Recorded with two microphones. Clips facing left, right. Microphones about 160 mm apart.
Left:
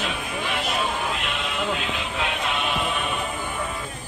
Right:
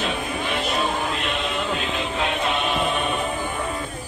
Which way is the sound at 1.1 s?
5° left (ahead or behind).